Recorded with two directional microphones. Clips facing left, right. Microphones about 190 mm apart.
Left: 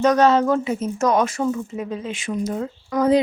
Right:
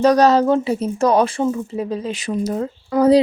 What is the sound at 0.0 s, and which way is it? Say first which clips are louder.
Speech: right 3 dB; 35° right (ahead or behind).